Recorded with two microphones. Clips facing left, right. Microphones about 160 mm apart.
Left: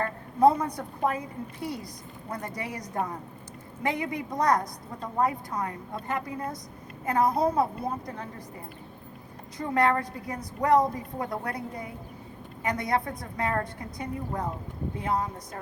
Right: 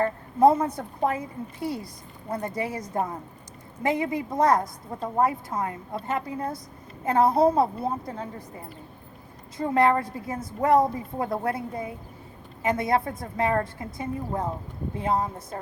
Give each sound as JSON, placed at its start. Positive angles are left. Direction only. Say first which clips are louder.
{"t": 0.0, "sound": "a woman's voice", "louder": "right 2 dB", "side_deg": -25}
{"t": 9.6, "sound": "a woman's voice", "louder": "right 3 dB", "side_deg": -25}